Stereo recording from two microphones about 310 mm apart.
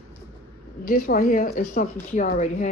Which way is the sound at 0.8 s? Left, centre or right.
Left.